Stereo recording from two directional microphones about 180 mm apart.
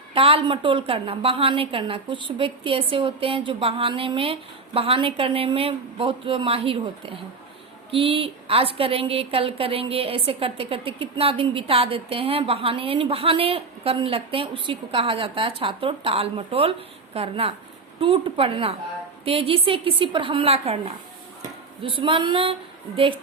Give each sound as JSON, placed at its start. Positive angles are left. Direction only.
{"t": 0.1, "sound": "a woman's voice", "side_deg": -30}